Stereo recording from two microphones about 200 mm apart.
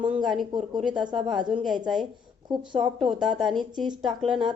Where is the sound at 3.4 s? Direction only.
Centre (ahead or behind).